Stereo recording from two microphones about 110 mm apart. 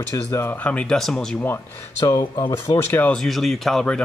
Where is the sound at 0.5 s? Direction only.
10° left (ahead or behind).